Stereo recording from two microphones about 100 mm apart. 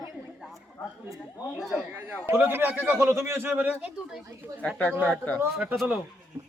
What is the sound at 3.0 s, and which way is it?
Speech, 30° right (ahead or behind).